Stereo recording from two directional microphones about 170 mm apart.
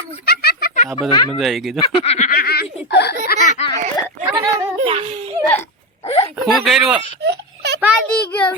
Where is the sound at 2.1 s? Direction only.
50° left (ahead or behind); by 3.3 s 75° left (ahead or behind).